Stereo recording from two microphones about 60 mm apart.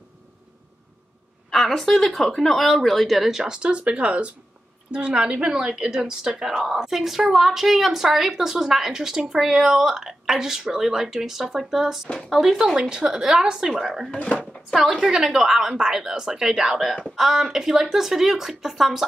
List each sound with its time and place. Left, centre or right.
1.5 s speech: centre
14.1 s speech: centre
14.9 s speech: centre